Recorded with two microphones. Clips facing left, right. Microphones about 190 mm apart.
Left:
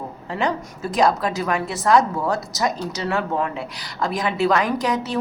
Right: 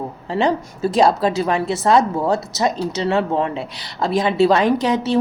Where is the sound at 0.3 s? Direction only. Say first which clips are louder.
Right 5 dB; 30° right (ahead or behind).